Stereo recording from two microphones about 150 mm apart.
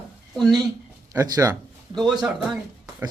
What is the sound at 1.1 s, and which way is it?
Speech, 25° right (ahead or behind).